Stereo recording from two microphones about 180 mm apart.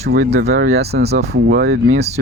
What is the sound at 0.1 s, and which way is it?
Speech, 60° right (ahead or behind).